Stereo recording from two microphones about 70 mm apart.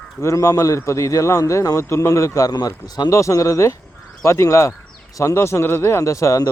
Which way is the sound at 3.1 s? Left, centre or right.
Left.